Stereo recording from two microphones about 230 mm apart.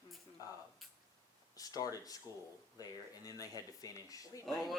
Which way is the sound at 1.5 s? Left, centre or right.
Centre.